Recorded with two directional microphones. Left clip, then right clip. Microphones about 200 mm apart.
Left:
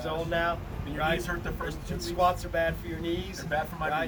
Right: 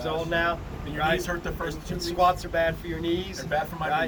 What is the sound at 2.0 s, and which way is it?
Speech, 15° left (ahead or behind).